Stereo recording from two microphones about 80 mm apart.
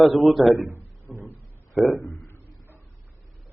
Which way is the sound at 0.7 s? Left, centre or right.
Right.